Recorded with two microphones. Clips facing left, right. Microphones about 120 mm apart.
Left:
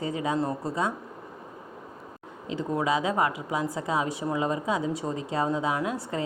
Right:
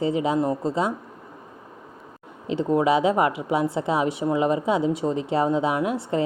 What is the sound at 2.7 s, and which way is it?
Speech, 25° right (ahead or behind).